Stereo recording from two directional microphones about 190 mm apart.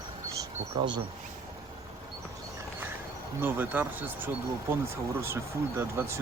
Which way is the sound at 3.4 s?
10° right (ahead or behind).